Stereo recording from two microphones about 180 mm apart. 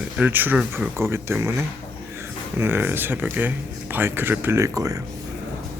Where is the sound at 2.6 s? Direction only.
10° right (ahead or behind).